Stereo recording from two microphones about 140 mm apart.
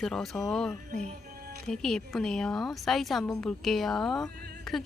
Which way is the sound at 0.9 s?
55° right (ahead or behind).